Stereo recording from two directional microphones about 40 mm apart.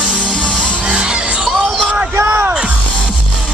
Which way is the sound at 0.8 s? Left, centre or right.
Right.